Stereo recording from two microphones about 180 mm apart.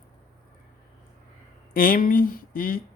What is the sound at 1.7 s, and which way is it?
Speech, 50° left (ahead or behind).